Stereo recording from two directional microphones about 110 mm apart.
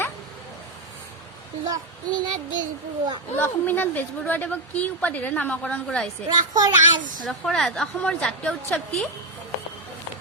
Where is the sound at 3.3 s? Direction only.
20° left (ahead or behind).